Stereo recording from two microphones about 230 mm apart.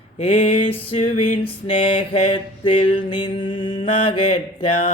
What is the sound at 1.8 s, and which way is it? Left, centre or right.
Mantra, left.